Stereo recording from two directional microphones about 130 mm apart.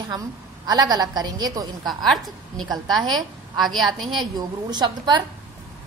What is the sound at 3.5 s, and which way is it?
Speech, centre (ahead or behind).